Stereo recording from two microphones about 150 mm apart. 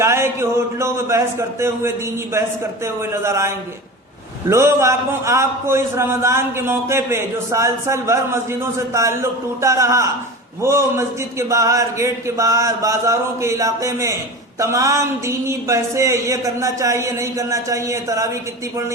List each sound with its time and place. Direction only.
0.0 s a man's voice: 15° right (ahead or behind)